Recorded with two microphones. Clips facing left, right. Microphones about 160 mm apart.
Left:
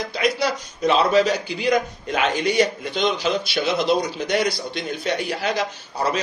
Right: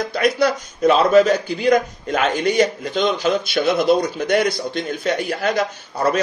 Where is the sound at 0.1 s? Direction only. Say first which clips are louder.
Right 4 dB; 55° right (ahead or behind).